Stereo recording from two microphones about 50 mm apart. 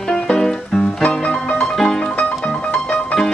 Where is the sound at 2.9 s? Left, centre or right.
Centre.